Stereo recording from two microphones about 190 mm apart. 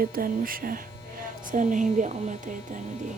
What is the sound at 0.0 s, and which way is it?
A woman's voice, 50° right (ahead or behind).